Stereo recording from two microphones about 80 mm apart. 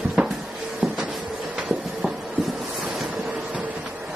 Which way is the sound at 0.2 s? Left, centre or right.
Centre.